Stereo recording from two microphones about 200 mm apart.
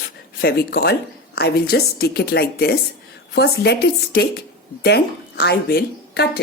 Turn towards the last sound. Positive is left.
turn(degrees=55)  # may be behind; listen again after turning